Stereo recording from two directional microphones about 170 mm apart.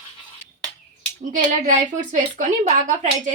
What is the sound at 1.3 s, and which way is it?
A woman's voice, 45° right (ahead or behind).